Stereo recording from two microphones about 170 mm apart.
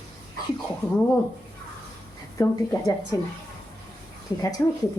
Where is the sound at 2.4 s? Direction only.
15° left (ahead or behind).